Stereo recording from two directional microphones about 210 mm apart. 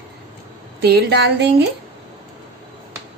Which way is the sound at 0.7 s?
50° right (ahead or behind).